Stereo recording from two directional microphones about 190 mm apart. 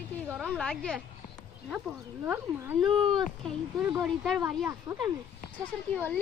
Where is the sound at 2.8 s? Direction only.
25° right (ahead or behind).